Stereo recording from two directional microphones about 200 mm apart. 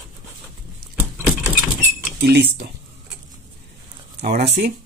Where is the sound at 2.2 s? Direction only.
55° right (ahead or behind).